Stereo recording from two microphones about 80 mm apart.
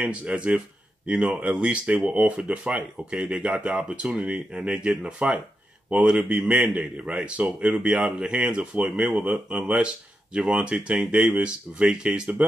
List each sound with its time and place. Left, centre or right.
0.0 s speech: centre